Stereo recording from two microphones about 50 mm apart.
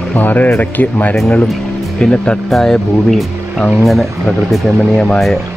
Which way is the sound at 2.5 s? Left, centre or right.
Centre.